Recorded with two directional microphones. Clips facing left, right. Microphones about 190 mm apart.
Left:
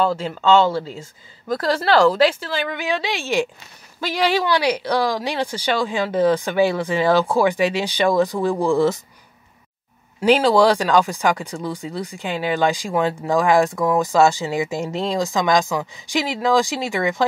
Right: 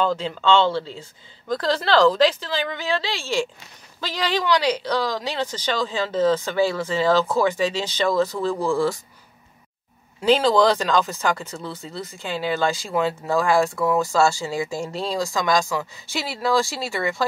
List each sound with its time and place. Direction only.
0.0 s speech: 10° left (ahead or behind)
10.2 s speech: 10° left (ahead or behind)